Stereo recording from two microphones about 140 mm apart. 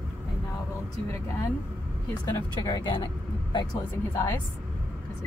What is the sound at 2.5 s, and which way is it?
Speech, 30° left (ahead or behind).